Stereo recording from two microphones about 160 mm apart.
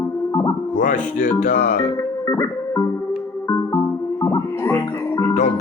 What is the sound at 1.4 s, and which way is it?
Speech, 55° left (ahead or behind).